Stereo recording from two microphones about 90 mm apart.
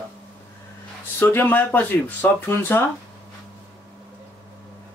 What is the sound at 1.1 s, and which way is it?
Speech, 20° left (ahead or behind).